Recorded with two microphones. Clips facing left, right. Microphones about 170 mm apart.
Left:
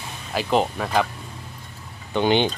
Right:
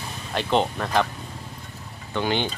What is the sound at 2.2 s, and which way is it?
Speech, 20° left (ahead or behind).